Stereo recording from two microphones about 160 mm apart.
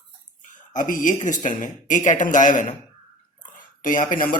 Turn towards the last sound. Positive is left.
turn(degrees=60)  # may be behind; listen again after turning